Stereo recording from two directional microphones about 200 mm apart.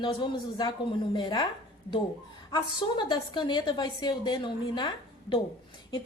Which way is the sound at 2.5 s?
25° left (ahead or behind).